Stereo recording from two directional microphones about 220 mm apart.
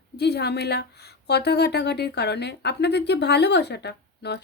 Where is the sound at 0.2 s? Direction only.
50° left (ahead or behind).